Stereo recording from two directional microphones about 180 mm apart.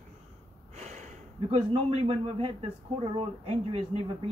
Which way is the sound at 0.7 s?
40° right (ahead or behind).